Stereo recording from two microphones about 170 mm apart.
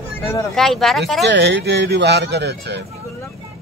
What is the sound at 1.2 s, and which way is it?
Speech, 90° right.